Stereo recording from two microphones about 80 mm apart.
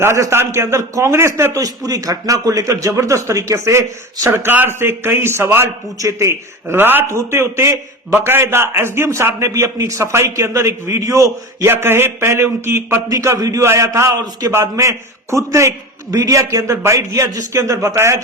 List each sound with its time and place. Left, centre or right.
0.0 s a man's voice: right
1.5 s speech: right
4.3 s a man's voice: right
6.0 s a man's voice: right
6.7 s a man's voice: right
11.7 s a man's voice: right
13.1 s a man's voice: right